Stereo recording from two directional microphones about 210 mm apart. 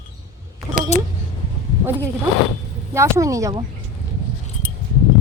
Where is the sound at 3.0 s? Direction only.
15° right (ahead or behind).